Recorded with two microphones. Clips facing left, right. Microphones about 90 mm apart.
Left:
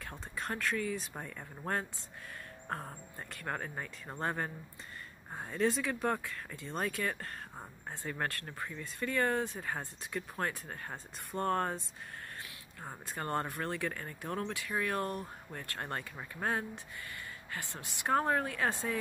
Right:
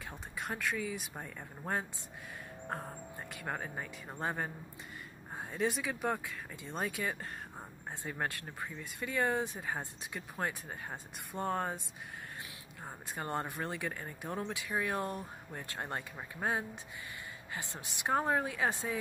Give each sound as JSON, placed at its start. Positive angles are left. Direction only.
{"t": 0.1, "sound": "speech", "side_deg": -10}
{"t": 3.3, "sound": "speech", "side_deg": -5}
{"t": 13.1, "sound": "speech", "side_deg": -10}